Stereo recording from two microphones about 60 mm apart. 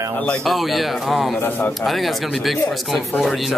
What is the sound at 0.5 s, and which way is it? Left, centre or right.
A man's voice, centre.